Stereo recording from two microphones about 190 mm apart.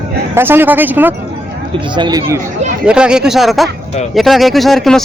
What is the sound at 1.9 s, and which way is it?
Speech, 20° right (ahead or behind).